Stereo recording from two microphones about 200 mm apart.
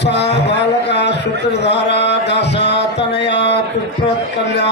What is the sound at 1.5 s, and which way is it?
Music, 60° left (ahead or behind).